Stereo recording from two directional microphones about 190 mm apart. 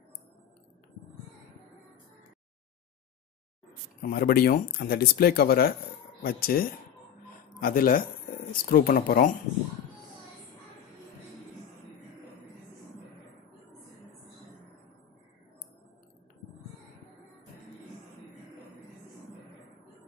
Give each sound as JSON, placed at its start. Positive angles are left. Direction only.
{"t": 4.0, "sound": "speech", "side_deg": 50}